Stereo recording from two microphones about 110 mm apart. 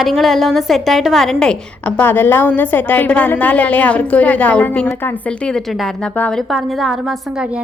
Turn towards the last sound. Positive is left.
turn(degrees=0)  # may be behind; listen again after turning